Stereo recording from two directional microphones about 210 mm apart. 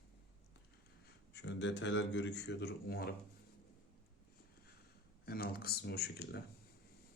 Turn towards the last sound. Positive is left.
turn(degrees=50)  # may be behind; listen again after turning